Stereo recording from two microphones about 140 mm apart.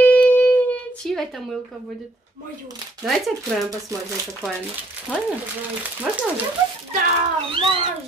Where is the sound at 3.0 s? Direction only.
Centre (ahead or behind).